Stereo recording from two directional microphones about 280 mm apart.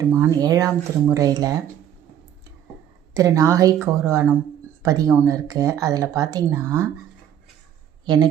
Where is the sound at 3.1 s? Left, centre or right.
Centre.